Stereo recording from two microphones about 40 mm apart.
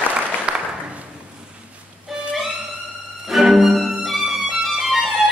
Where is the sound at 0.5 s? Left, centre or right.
Right.